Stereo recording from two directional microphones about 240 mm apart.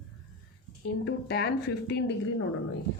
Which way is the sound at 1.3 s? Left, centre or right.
Left.